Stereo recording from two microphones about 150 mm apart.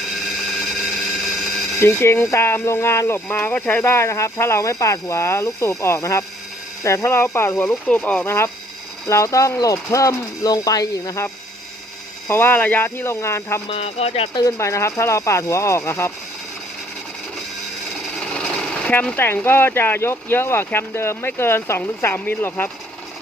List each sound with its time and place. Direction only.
0.0 s a sound: centre (ahead or behind)
1.8 s speech: 15° left (ahead or behind)
12.3 s speech: 15° left (ahead or behind)
13.7 s speech: 40° left (ahead or behind)
14.3 s speech: 20° left (ahead or behind)
18.2 s sewing machine: 5° left (ahead or behind)
19.5 s speech: 15° left (ahead or behind)